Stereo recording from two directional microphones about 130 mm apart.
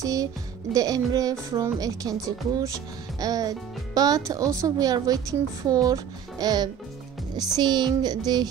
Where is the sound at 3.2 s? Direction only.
30° right (ahead or behind).